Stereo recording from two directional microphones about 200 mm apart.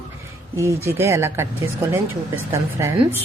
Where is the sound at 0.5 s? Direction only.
15° right (ahead or behind).